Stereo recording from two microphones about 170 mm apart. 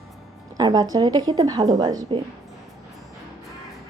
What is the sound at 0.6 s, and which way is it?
A woman's voice, 20° right (ahead or behind).